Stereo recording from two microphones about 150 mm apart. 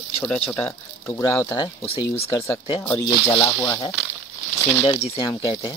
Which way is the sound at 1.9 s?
40° left (ahead or behind).